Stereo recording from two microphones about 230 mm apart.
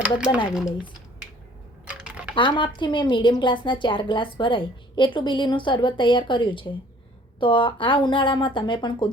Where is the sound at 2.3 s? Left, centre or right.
Left.